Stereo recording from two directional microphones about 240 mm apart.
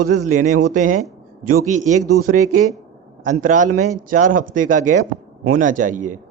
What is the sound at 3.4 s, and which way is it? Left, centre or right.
A man's voice, right.